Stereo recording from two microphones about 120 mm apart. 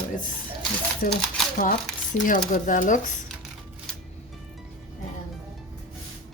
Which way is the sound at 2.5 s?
90° left.